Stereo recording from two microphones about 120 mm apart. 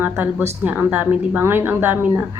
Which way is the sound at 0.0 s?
15° right (ahead or behind).